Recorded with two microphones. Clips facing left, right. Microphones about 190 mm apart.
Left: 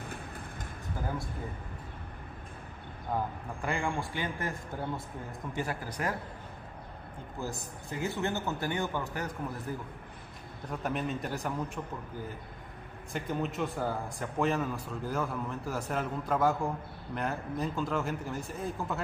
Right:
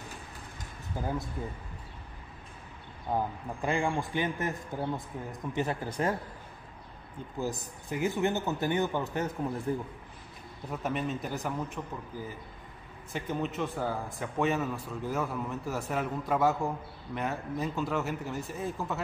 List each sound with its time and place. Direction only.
1.0 s a man's voice: 20° right (ahead or behind)
3.6 s a man's voice: 20° right (ahead or behind)
7.3 s a man's voice: 15° right (ahead or behind)
10.7 s a man's voice: centre (ahead or behind)